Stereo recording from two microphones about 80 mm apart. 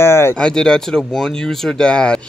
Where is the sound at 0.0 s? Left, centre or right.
Left.